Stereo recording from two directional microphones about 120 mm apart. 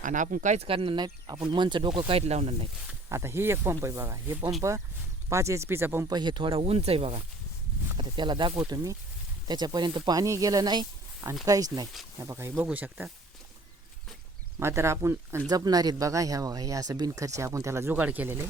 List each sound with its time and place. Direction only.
0.0 s speech: 90° right
0.7 s speech: 50° right (ahead or behind)
3.1 s speech: 20° right (ahead or behind)
6.1 s speech: 40° right (ahead or behind); by 7.2 s 55° right (ahead or behind)
7.9 s speech: 40° right (ahead or behind); by 13.1 s 15° right (ahead or behind)
14.6 s speech: 25° right (ahead or behind)
15.4 s speech: 30° right (ahead or behind); by 18.3 s 15° right (ahead or behind)